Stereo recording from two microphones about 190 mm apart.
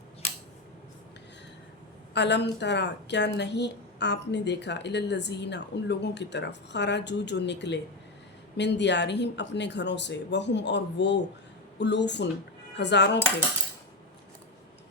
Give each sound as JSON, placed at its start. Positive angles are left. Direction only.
{"t": 2.1, "sound": "a woman's voice", "side_deg": 65}